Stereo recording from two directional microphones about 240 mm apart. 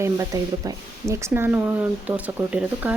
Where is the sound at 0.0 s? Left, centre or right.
Centre.